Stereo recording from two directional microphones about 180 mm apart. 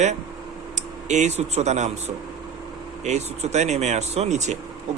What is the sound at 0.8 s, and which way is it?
Speech, 40° right (ahead or behind).